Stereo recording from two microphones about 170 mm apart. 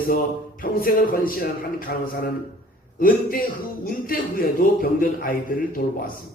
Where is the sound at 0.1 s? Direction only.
55° left (ahead or behind).